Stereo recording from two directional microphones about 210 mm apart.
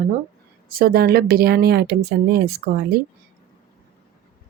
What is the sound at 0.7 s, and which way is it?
Speech, 45° right (ahead or behind).